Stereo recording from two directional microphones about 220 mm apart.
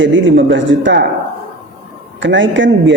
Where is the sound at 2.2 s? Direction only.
55° right (ahead or behind).